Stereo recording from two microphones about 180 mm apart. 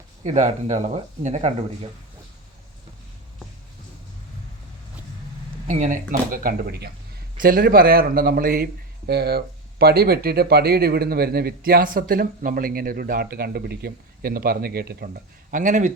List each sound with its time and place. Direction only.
0.3 s speech: 40° right (ahead or behind)
5.6 s speech: 45° right (ahead or behind)